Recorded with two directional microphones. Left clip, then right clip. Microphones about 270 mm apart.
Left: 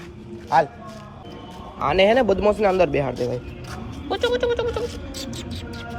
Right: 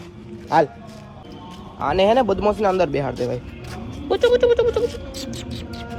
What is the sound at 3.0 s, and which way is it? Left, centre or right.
Music, centre.